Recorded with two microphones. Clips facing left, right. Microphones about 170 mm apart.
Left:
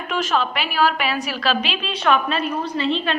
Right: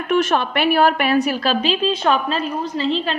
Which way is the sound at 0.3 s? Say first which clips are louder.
Right 4 dB; 55° right (ahead or behind).